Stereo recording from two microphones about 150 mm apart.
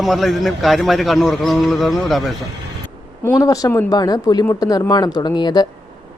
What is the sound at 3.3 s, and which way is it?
Speech, 25° left (ahead or behind).